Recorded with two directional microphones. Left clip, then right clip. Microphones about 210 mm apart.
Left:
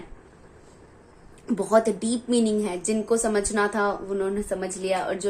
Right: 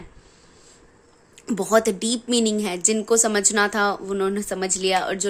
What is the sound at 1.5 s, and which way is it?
A woman's voice, 45° right (ahead or behind).